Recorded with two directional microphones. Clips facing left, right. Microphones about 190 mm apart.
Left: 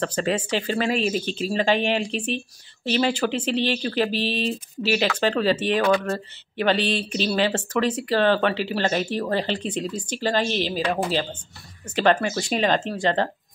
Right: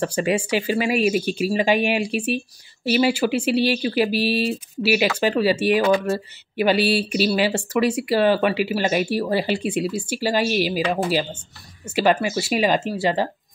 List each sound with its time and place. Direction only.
0.0 s speech: 10° right (ahead or behind)